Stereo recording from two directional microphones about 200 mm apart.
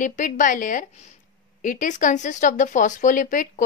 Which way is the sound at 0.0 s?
40° left (ahead or behind).